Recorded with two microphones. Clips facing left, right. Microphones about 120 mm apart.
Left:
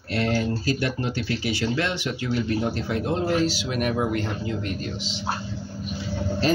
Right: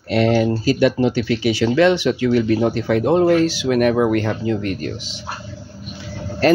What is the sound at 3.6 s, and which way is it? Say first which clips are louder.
Speech: right 9 dB; 65° right (ahead or behind).